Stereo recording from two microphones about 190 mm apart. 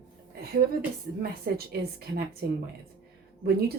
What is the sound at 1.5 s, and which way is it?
Speech, 55° right (ahead or behind).